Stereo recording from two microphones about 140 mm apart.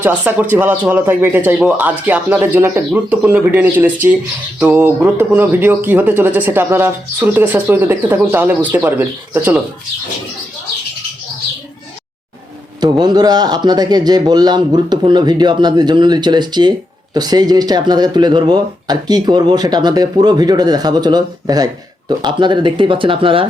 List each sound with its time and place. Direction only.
0.0 s speech: 10° right (ahead or behind)
12.8 s speech: 30° right (ahead or behind)